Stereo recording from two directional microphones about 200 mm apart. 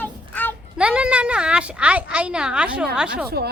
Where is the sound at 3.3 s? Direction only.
50° right (ahead or behind).